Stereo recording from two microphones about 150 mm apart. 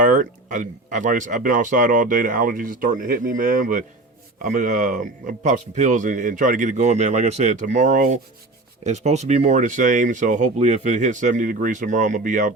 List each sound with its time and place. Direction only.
0.0 s speech: 65° right (ahead or behind)